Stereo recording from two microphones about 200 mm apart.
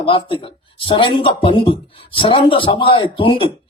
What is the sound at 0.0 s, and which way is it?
Speech, 25° left (ahead or behind).